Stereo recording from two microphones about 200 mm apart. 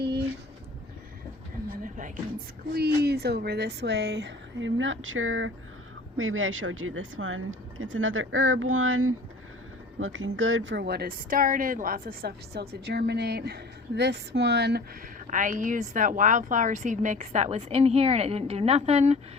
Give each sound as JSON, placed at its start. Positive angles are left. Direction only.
{"t": 1.8, "sound": "a sound", "side_deg": -40}
{"t": 2.7, "sound": "a woman's voice", "side_deg": -55}
{"t": 10.0, "sound": "a woman's voice", "side_deg": -70}
{"t": 15.3, "sound": "a woman's voice", "side_deg": -40}